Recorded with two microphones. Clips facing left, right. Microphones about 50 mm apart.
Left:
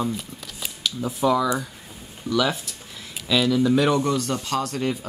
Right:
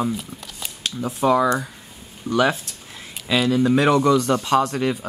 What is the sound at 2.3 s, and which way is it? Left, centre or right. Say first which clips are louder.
Speech: right 3 dB; right.